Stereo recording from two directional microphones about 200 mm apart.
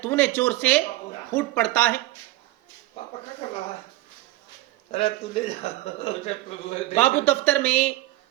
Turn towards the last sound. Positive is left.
turn(degrees=10)  # may be behind; listen again after turning